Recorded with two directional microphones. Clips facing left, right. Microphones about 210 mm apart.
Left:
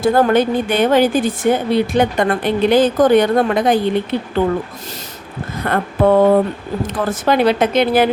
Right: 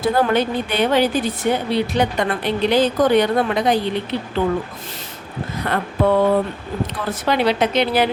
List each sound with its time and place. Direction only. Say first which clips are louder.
0.0 s speech: left 4 dB; 45° left (ahead or behind)
5.6 s speech: left 4 dB; 50° left (ahead or behind)